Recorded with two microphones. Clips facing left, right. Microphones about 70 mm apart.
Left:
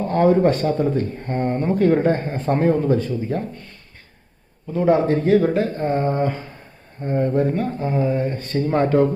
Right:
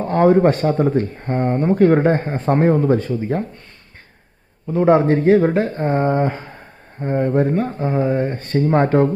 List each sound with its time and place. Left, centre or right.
0.1 s a man's voice: right
0.6 s mantra: right
1.2 s a man's voice: right
1.8 s mantra: right
2.2 s a man's voice: right
2.9 s speech: right
4.7 s a man's voice: right
7.0 s mantra: right